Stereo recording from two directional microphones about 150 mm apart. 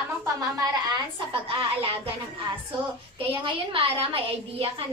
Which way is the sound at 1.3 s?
35° right (ahead or behind).